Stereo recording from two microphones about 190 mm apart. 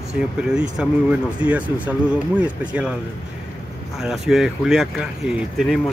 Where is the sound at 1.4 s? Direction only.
5° right (ahead or behind).